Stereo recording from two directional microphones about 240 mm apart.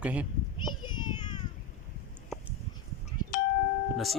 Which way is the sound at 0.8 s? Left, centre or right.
Centre.